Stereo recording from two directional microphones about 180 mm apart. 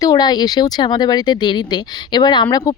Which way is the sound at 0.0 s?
20° left (ahead or behind).